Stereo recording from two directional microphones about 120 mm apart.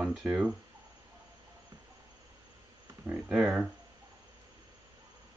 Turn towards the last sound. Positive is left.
turn(degrees=-5)  # may be behind; listen again after turning